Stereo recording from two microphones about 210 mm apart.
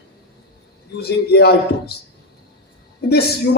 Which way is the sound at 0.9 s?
50° left (ahead or behind).